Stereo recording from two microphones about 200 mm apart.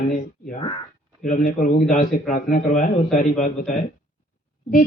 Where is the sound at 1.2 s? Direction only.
45° left (ahead or behind).